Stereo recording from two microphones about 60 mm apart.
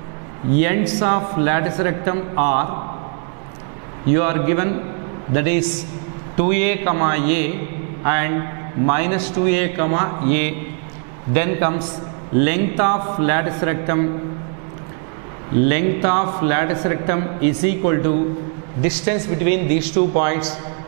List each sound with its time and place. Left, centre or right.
0.6 s speech: centre
4.1 s a man's voice: centre
15.6 s a man's voice: centre